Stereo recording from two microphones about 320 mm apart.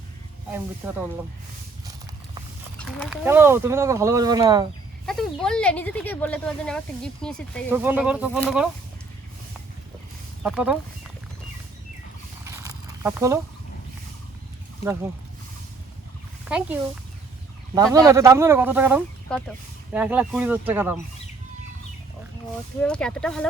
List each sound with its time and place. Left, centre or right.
0.8 s speech: centre
2.7 s speech: centre
5.0 s speech: centre
10.4 s speech: centre
12.5 s a sound: centre
16.5 s speech: centre
17.9 s speech: centre
22.8 s speech: centre